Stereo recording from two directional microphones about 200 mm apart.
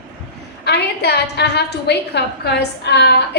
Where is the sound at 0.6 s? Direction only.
55° left (ahead or behind).